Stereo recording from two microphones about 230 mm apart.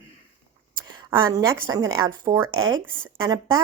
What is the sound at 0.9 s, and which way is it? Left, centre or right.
A woman's voice, centre.